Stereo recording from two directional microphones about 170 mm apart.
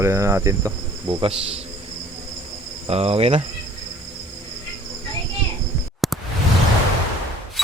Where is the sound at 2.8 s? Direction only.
35° right (ahead or behind).